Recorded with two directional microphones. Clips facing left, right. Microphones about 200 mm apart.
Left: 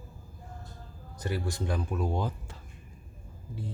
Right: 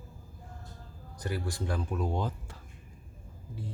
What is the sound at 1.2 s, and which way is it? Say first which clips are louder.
Speech: left 2 dB; 25° left (ahead or behind).